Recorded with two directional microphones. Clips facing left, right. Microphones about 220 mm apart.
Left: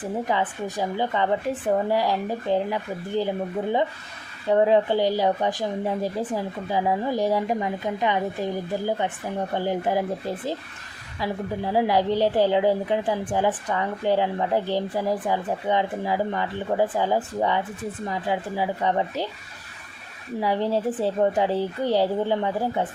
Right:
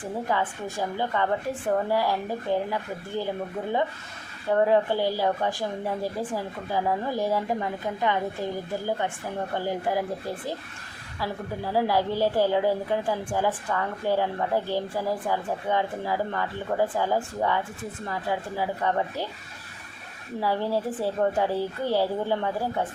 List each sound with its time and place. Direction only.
0.0 s a woman's voice: 20° left (ahead or behind)
4.5 s a woman's voice: 20° left (ahead or behind)
9.6 s a woman's voice: 20° left (ahead or behind)
20.4 s a woman's voice: 20° left (ahead or behind)